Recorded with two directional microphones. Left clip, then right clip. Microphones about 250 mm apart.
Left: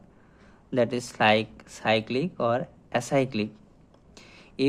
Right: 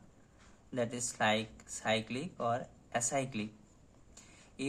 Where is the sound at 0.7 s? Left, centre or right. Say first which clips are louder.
Left 11 dB; left.